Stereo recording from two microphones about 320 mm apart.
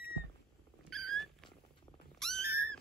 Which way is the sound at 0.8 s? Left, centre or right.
Centre.